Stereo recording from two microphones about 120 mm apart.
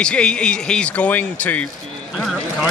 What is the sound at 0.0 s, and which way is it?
Speech, 10° left (ahead or behind).